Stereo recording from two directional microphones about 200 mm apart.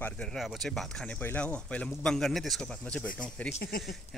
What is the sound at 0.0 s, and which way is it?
Speech, centre (ahead or behind).